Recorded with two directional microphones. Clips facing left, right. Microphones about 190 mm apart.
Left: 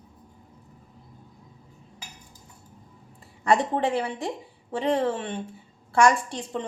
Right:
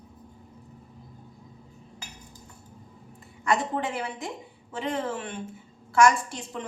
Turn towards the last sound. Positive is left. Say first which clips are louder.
# left 2 dB
turn(degrees=30)  # may be behind; listen again after turning